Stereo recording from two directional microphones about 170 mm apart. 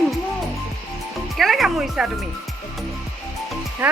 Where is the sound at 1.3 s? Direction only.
Centre (ahead or behind).